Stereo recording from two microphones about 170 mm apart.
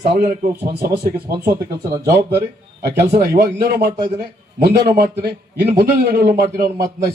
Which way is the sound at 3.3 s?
60° right (ahead or behind).